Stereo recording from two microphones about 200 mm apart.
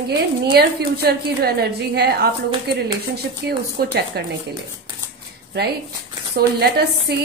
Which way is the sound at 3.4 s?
55° right (ahead or behind).